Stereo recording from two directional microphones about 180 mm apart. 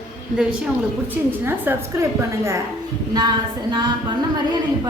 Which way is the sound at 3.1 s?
25° right (ahead or behind).